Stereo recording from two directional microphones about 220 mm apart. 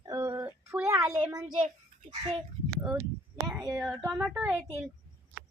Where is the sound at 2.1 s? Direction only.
30° right (ahead or behind).